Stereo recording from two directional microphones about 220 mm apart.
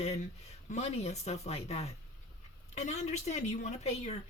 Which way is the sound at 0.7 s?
30° left (ahead or behind).